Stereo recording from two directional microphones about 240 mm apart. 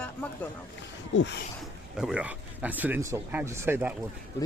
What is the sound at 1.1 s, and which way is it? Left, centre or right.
Speech, left.